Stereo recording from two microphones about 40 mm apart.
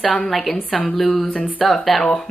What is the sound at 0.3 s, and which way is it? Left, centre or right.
A woman's voice, centre.